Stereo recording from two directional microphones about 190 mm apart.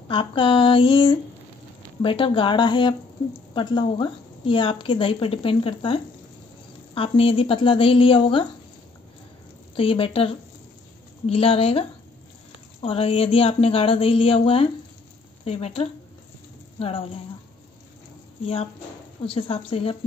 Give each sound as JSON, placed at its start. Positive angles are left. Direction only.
{"t": 0.1, "sound": "a woman's voice", "side_deg": 25}
{"t": 7.0, "sound": "a woman's voice", "side_deg": 30}
{"t": 9.8, "sound": "a woman's voice", "side_deg": 30}
{"t": 12.8, "sound": "a woman's voice", "side_deg": 30}
{"t": 18.4, "sound": "a woman's voice", "side_deg": 30}